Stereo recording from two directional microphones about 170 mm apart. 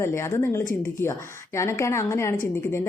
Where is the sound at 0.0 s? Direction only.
15° left (ahead or behind).